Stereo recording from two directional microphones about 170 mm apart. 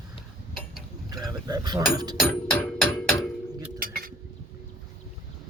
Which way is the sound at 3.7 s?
60° right (ahead or behind).